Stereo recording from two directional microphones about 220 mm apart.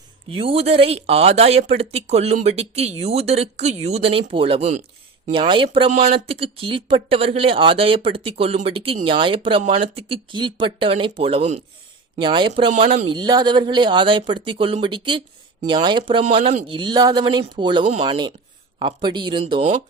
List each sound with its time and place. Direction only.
0.3 s speech: 25° right (ahead or behind)